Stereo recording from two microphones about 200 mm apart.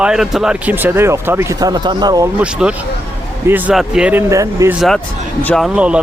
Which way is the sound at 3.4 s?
10° right (ahead or behind).